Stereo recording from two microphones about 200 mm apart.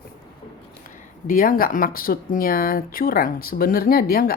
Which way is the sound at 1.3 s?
45° left (ahead or behind).